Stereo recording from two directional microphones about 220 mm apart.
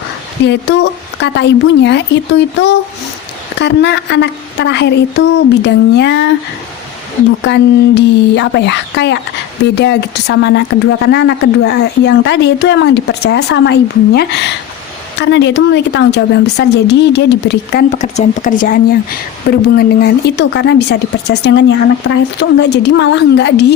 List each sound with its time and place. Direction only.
0.4 s speech: 50° left (ahead or behind)
7.4 s speech: 50° left (ahead or behind)
17.9 s speech: 30° left (ahead or behind); by 23.7 s 50° left (ahead or behind)